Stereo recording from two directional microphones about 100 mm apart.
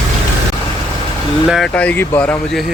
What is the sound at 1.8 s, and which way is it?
Speech, 15° left (ahead or behind).